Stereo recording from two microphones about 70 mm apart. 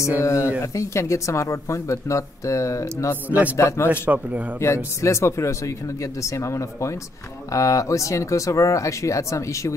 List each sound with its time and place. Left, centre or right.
0.2 s speech: left
3.3 s a man's voice: right
3.5 s speech: left
4.1 s a man's voice: right
4.6 s speech: left